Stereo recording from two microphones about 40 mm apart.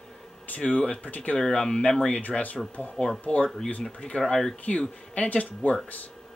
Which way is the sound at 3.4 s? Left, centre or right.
Centre.